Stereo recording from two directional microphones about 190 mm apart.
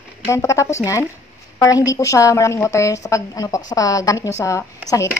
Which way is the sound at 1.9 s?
15° left (ahead or behind).